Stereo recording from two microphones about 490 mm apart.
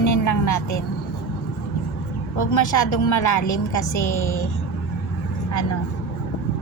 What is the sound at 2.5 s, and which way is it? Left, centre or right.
A woman's voice, left.